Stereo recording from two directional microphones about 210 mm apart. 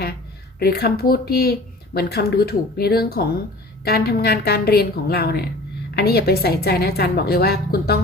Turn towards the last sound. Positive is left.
turn(degrees=50)  # may be behind; listen again after turning